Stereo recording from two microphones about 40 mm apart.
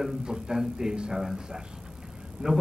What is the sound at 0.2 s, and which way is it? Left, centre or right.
A man's voice, centre.